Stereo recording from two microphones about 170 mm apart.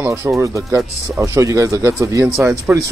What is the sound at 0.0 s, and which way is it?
Speech, 15° right (ahead or behind).